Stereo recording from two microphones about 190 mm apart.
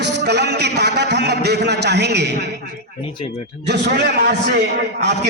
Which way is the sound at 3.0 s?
30° left (ahead or behind).